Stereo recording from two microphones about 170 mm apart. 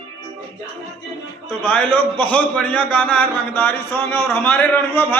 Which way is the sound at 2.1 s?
10° left (ahead or behind).